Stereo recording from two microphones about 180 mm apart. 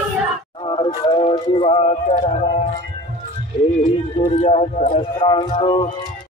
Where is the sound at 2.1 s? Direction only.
35° left (ahead or behind).